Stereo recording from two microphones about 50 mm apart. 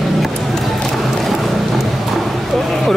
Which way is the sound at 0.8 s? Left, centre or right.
Centre.